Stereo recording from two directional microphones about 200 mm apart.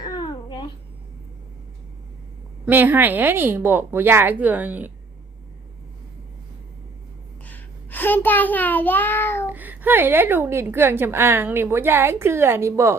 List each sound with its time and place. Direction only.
0.0 s babbling: 20° left (ahead or behind)
2.6 s a woman's voice: 10° right (ahead or behind)
7.4 s child singing: 10° left (ahead or behind)
9.5 s a woman's voice: 10° right (ahead or behind)